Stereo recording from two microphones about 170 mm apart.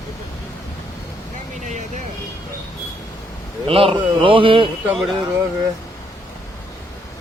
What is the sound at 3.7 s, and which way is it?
A man's voice, 35° right (ahead or behind).